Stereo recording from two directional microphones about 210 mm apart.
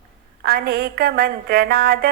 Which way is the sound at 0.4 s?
45° right (ahead or behind).